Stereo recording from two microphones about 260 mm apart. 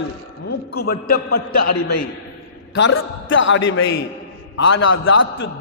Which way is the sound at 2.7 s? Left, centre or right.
Left.